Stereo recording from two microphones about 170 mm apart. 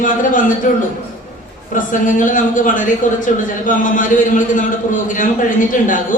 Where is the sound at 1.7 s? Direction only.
50° left (ahead or behind).